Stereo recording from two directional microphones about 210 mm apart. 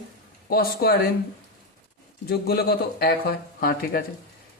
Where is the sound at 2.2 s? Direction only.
50° left (ahead or behind).